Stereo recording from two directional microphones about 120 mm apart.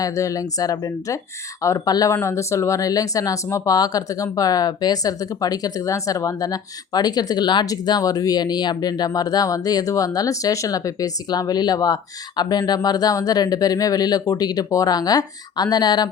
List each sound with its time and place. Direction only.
0.0 s speech: 25° left (ahead or behind)